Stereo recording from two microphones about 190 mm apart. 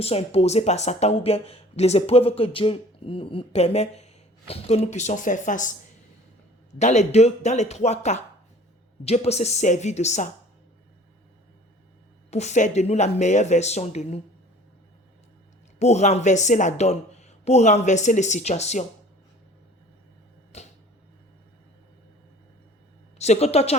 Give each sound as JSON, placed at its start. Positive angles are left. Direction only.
{"t": 0.0, "sound": "speech", "side_deg": 35}
{"t": 6.7, "sound": "speech", "side_deg": 35}
{"t": 12.3, "sound": "speech", "side_deg": 35}
{"t": 15.8, "sound": "speech", "side_deg": 35}
{"t": 20.5, "sound": "a sound", "side_deg": 35}
{"t": 23.1, "sound": "a woman's voice", "side_deg": 35}